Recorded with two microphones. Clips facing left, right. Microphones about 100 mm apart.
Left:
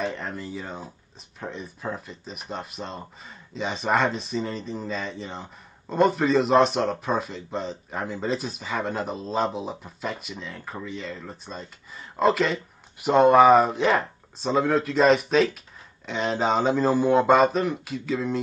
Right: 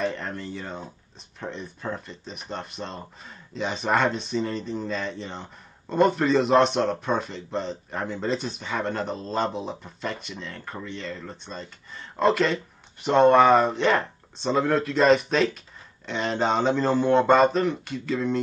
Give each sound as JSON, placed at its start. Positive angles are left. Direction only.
{"t": 0.0, "sound": "speech", "side_deg": 0}